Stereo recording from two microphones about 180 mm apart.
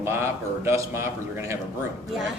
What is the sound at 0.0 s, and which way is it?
Speech, 15° right (ahead or behind).